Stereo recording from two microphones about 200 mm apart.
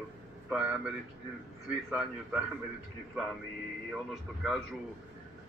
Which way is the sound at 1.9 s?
Centre (ahead or behind).